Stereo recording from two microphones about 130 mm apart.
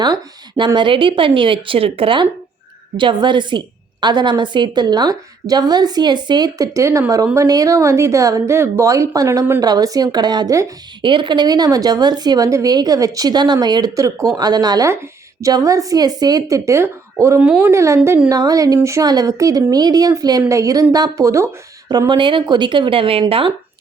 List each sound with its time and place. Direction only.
0.0 s a woman's voice: 35° right (ahead or behind)
11.0 s a woman's voice: 40° right (ahead or behind)